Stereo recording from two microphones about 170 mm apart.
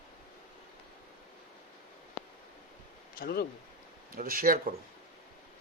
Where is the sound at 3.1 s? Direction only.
65° left (ahead or behind).